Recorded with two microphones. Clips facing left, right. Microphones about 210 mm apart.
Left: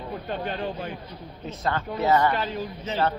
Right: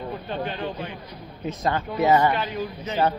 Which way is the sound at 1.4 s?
15° right (ahead or behind).